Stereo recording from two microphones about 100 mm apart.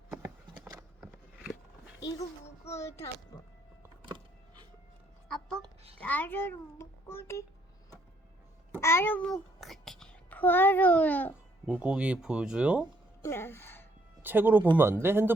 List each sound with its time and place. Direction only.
0.1 s a sound: 20° right (ahead or behind)
1.0 s a sound: 5° right (ahead or behind)
2.6 s a child's voice: 30° left (ahead or behind)
6.0 s a child's voice: 15° left (ahead or behind)
8.8 s a child's voice: 25° left (ahead or behind)
9.2 s a sound: centre (ahead or behind)
10.3 s a child's voice: 20° left (ahead or behind)
11.6 s speech: 10° right (ahead or behind)
13.2 s speech: 25° left (ahead or behind)
14.2 s speech: 20° right (ahead or behind)